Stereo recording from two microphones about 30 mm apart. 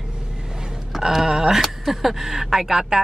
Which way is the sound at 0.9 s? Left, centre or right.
Centre.